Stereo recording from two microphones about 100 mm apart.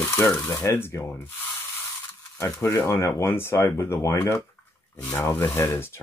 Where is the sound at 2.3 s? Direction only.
30° left (ahead or behind).